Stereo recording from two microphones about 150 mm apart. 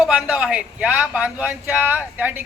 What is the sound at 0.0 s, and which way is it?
A man's voice, 5° right (ahead or behind).